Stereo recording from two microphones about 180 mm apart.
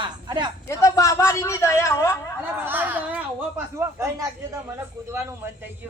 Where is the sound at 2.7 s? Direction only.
10° right (ahead or behind).